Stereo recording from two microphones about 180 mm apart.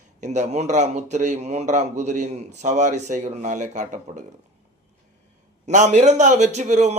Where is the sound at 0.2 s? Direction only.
40° right (ahead or behind).